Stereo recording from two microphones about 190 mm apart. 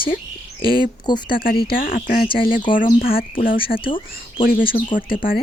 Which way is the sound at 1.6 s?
50° left (ahead or behind).